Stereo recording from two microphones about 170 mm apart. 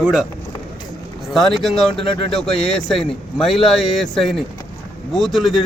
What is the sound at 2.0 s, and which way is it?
Speech, 75° right (ahead or behind).